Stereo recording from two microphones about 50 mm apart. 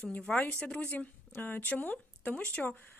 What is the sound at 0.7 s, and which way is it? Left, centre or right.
Speech, left.